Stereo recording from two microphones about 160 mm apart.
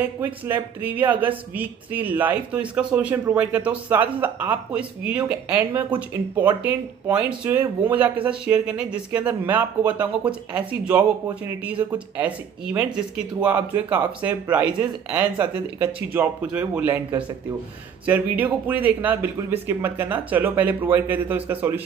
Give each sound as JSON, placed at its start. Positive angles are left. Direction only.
{"t": 0.2, "sound": "speech", "side_deg": -10}